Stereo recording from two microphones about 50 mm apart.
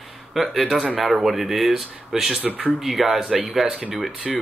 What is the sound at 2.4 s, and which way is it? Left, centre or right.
Speech, right.